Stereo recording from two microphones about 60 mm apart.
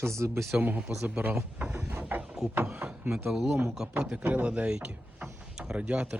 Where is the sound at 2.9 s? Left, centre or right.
Centre.